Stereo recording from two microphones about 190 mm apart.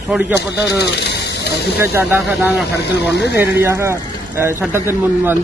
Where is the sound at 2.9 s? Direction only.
65° left (ahead or behind).